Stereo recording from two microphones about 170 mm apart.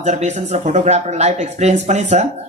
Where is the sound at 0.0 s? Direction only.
45° right (ahead or behind).